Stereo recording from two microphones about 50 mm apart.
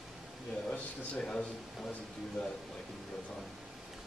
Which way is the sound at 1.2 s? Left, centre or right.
Centre.